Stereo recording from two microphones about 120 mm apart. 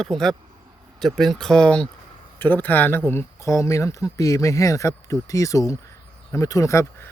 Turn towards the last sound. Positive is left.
turn(degrees=25)  # may be behind; listen again after turning